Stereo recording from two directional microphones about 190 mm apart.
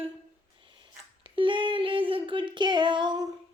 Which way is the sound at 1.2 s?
25° right (ahead or behind).